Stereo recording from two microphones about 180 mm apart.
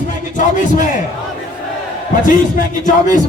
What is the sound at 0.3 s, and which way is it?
Speech, 45° left (ahead or behind).